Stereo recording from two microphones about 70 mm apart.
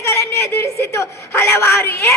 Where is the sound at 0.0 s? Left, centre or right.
Left.